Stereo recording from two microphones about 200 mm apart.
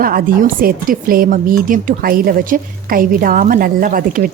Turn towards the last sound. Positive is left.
turn(degrees=-45)  # may be behind; listen again after turning